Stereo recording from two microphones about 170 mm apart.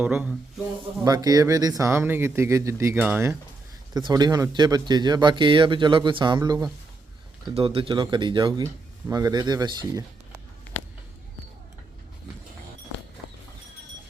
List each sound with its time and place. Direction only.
0.0 s speech: 5° right (ahead or behind)
1.0 s speech: 20° right (ahead or behind)
3.9 s speech: 25° right (ahead or behind)